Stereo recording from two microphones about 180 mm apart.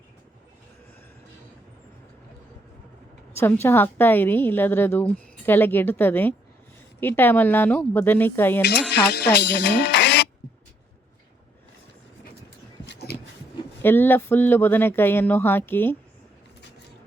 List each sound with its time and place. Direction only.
3.3 s a woman's voice: 10° left (ahead or behind)
8.6 s speech: 70° left (ahead or behind)
12.8 s a sound: 70° left (ahead or behind)
13.8 s a woman's voice: 10° left (ahead or behind)